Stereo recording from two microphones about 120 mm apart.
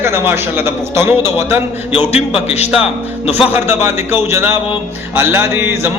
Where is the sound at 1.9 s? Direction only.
60° left (ahead or behind).